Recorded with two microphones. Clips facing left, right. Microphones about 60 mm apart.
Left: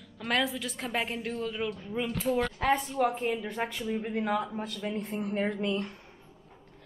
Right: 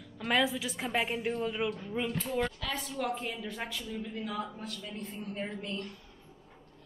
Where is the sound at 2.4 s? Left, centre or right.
Left.